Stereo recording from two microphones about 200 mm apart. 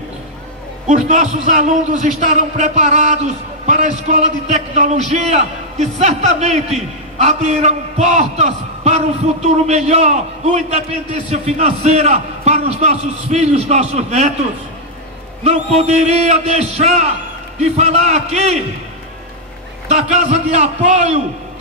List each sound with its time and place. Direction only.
0.8 s a man's voice: 35° right (ahead or behind)
15.4 s a man's voice: 35° right (ahead or behind)
19.9 s a man's voice: 35° right (ahead or behind)